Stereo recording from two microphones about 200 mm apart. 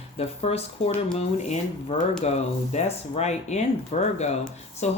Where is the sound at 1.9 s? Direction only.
30° left (ahead or behind).